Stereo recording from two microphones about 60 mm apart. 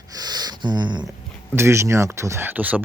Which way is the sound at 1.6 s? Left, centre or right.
Right.